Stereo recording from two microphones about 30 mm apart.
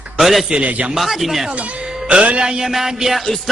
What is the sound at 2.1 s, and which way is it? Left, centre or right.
Speech, right.